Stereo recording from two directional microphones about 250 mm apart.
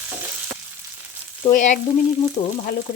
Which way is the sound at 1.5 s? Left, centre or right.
Left.